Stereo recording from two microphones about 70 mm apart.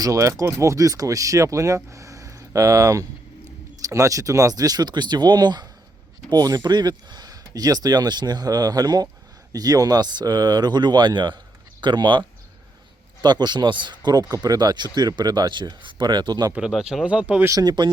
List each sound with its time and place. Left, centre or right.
0.0 s speech: right
6.3 s speech: right
13.2 s speech: right
16.6 s speech: centre
17.5 s speech: right